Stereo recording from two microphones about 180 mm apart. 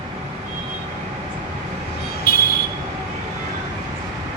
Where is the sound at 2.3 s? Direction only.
55° left (ahead or behind).